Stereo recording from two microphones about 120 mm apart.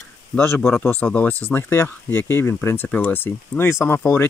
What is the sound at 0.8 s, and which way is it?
Speech, 15° left (ahead or behind).